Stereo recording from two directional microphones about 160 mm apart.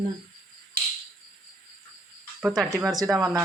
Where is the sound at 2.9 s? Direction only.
20° right (ahead or behind).